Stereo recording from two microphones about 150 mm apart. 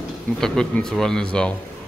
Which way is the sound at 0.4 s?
5° left (ahead or behind).